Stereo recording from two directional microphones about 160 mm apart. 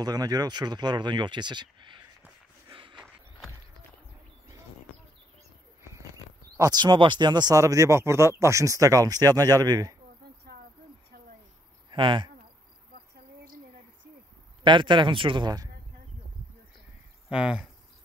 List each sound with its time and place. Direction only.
0.0 s speech: 25° right (ahead or behind)
2.7 s a sound: 30° right (ahead or behind)
3.0 s a sound: centre (ahead or behind)
6.5 s speech: 25° right (ahead or behind)
11.9 s speech: 30° right (ahead or behind)
14.6 s speech: 30° right (ahead or behind)
17.3 s speech: 5° right (ahead or behind)